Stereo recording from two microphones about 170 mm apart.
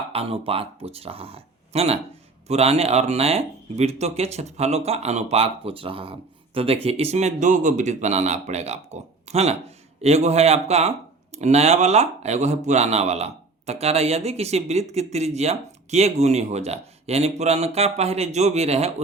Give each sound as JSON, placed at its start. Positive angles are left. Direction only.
{"t": 0.1, "sound": "speech", "side_deg": -35}